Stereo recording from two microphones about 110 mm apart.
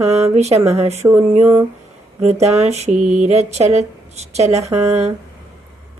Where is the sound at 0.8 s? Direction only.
75° right (ahead or behind).